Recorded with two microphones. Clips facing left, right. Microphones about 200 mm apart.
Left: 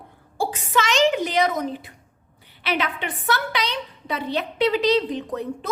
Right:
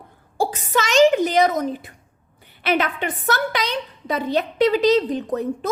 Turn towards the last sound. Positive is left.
turn(degrees=-45)  # may be behind; listen again after turning